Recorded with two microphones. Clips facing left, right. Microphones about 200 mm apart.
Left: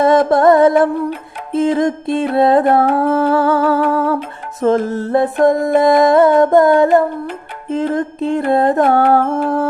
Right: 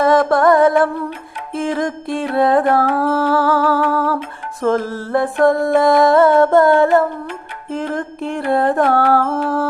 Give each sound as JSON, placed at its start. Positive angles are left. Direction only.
{"t": 0.0, "sound": "music", "side_deg": 20}